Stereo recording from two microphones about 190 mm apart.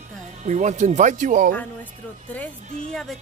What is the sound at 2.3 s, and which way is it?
Speech, 5° left (ahead or behind).